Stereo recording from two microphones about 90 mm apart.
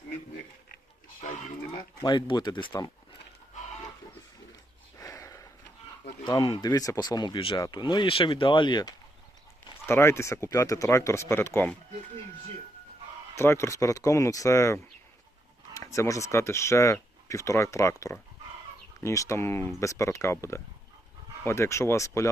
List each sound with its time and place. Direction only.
2.0 s speech: 60° left (ahead or behind)
4.9 s a sound: 40° left (ahead or behind)
6.2 s speech: 60° left (ahead or behind)
6.7 s speech: 40° left (ahead or behind); by 7.6 s 65° left (ahead or behind)
7.6 s speech: 55° left (ahead or behind)
9.8 s speech: 30° left (ahead or behind)
13.3 s speech: 30° left (ahead or behind)